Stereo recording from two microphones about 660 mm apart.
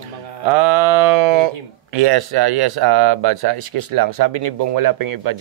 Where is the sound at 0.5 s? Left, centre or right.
Right.